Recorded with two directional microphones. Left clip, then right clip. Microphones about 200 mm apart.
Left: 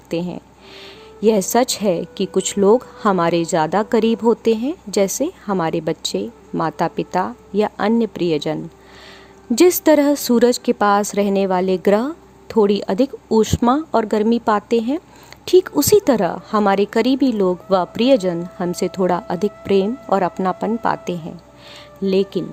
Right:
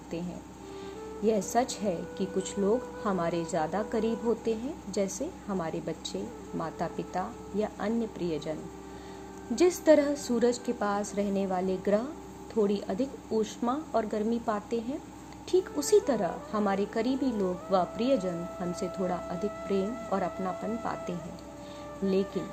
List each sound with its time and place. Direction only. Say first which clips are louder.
0.1 s speech: left 15 dB; 55° left (ahead or behind)
9.6 s speech: left 10 dB; 60° left (ahead or behind)